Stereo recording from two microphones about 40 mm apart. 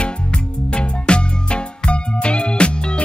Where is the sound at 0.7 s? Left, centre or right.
Left.